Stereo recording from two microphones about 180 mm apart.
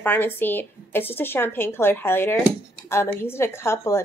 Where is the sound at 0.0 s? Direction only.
10° left (ahead or behind).